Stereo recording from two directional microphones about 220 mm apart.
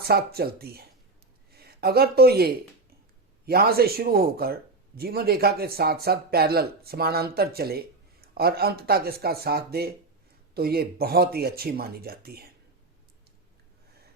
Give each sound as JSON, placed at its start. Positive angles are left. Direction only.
{"t": 0.1, "sound": "speech", "side_deg": -45}